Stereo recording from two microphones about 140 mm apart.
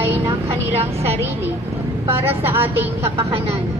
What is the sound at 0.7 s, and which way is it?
Speech, 50° right (ahead or behind).